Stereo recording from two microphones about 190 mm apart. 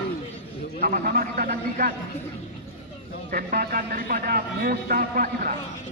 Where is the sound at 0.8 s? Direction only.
50° right (ahead or behind).